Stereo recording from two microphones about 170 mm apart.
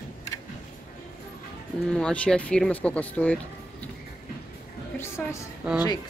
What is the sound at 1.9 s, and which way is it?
Speech, 5° left (ahead or behind).